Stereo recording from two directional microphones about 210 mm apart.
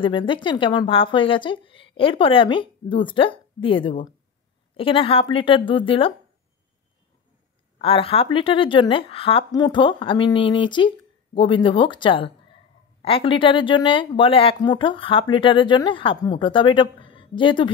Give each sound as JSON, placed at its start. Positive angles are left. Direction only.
{"t": 0.0, "sound": "a woman's voice", "side_deg": 25}
{"t": 7.8, "sound": "a woman's voice", "side_deg": 25}